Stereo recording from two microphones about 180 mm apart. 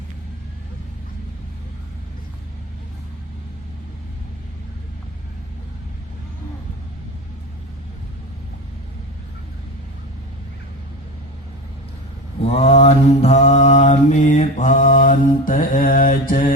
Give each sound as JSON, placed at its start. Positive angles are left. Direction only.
{"t": 12.4, "sound": "mantra", "side_deg": 35}